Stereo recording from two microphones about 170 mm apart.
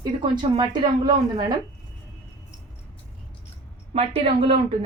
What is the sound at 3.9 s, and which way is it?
Speech, 35° right (ahead or behind).